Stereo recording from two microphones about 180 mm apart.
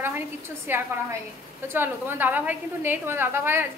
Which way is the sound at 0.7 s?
10° right (ahead or behind).